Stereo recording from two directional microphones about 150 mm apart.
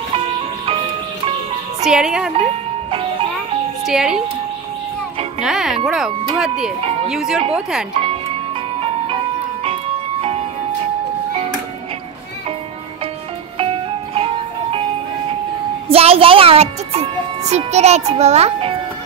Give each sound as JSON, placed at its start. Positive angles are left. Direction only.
{"t": 1.9, "sound": "tubular bells", "side_deg": -5}
{"t": 3.8, "sound": "tubular bells", "side_deg": -5}
{"t": 5.4, "sound": "tubular bells", "side_deg": -5}
{"t": 7.9, "sound": "music", "side_deg": -40}
{"t": 14.1, "sound": "music", "side_deg": -40}
{"t": 15.9, "sound": "speech", "side_deg": -40}